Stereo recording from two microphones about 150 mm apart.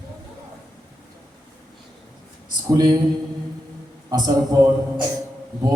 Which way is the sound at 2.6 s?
25° right (ahead or behind).